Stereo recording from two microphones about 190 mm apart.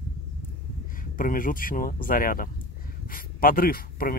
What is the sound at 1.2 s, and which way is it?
Speech, 45° left (ahead or behind).